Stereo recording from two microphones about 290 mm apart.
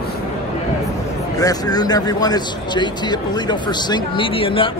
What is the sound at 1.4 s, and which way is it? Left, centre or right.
A man's voice, centre.